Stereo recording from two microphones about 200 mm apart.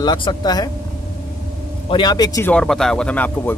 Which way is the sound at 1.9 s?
20° left (ahead or behind).